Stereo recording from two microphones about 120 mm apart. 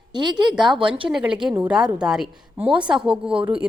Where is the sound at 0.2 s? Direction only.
40° right (ahead or behind).